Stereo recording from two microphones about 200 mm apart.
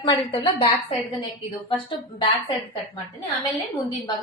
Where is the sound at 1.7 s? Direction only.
25° left (ahead or behind).